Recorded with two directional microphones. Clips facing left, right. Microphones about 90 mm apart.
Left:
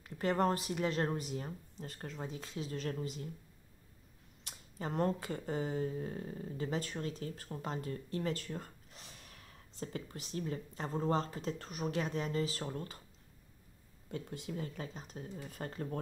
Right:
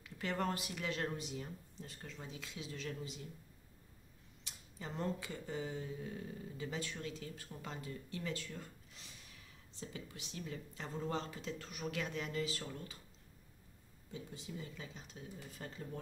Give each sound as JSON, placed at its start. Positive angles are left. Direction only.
{"t": 0.0, "sound": "speech", "side_deg": 40}
{"t": 4.5, "sound": "speech", "side_deg": 50}
{"t": 14.1, "sound": "speech", "side_deg": 60}